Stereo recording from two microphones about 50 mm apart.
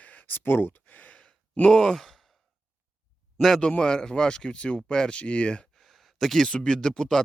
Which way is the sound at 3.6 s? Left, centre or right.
Centre.